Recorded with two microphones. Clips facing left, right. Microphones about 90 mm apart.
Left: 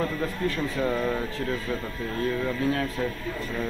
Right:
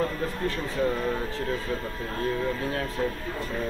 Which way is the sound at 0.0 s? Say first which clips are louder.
Left 1 dB; 30° right (ahead or behind).